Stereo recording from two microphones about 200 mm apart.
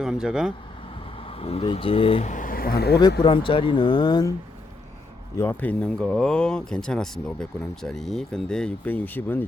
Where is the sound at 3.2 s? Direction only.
25° left (ahead or behind).